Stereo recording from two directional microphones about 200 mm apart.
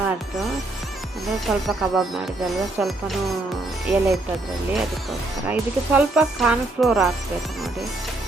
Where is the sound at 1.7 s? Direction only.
Centre (ahead or behind).